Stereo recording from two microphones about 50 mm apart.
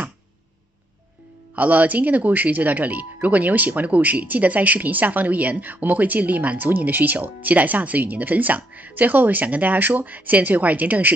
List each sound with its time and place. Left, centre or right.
1.5 s speech: right